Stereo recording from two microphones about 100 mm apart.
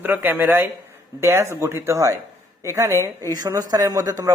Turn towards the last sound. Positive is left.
turn(degrees=-35)  # may be behind; listen again after turning